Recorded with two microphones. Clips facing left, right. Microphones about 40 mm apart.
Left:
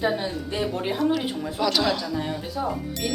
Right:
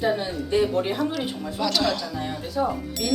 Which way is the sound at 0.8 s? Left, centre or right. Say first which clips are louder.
Left 1 dB; centre.